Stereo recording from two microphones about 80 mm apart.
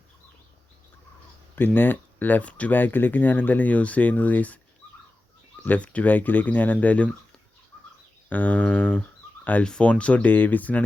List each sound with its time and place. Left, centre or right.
1.5 s speech: left
5.6 s speech: centre
8.3 s speech: centre